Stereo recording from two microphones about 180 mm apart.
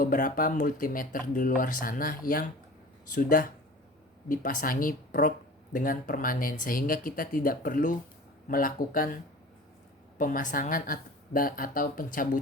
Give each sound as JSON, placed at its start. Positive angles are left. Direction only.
{"t": 0.0, "sound": "speech", "side_deg": 50}
{"t": 10.2, "sound": "speech", "side_deg": 50}